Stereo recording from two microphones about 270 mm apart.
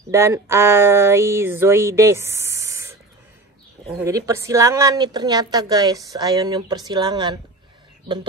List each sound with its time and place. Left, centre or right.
0.1 s a woman's voice: centre
4.0 s a woman's voice: centre